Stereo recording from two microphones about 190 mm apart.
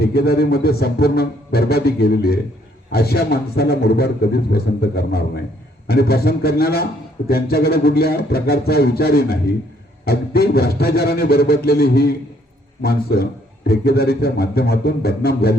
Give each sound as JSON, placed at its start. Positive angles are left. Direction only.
{"t": 0.1, "sound": "a man's voice", "side_deg": 55}